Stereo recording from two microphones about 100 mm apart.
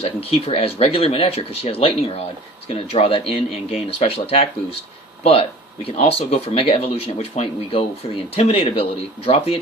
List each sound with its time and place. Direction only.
0.0 s speech: 80° left
5.2 s speech: 85° left